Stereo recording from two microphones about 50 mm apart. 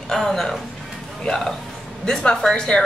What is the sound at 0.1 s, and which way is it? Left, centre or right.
A woman's voice, centre.